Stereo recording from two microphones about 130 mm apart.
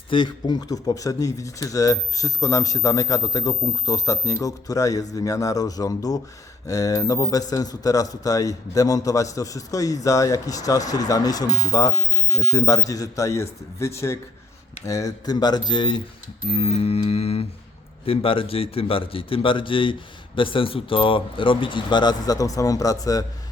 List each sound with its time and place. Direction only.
0.1 s a man's voice: 35° left (ahead or behind)
16.5 s a sound: 50° left (ahead or behind)
18.0 s a man's voice: 45° left (ahead or behind); by 23.2 s 25° left (ahead or behind)